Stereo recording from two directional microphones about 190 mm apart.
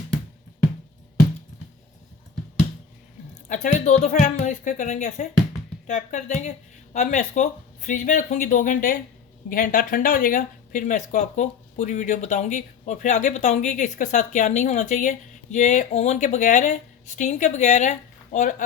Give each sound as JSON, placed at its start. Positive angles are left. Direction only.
{"t": 3.5, "sound": "speech", "side_deg": 40}